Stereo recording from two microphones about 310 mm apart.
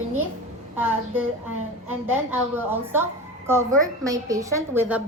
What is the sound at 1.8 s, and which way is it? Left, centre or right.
A woman's voice, centre.